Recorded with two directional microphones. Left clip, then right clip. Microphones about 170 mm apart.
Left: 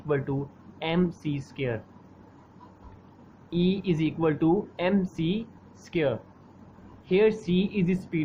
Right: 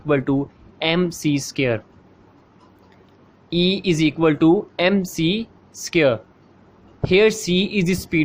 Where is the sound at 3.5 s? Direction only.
45° right (ahead or behind).